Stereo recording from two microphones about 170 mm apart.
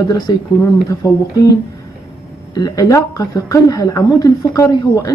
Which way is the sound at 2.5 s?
20° left (ahead or behind).